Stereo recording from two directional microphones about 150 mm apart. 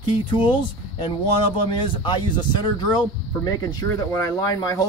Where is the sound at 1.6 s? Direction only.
35° left (ahead or behind).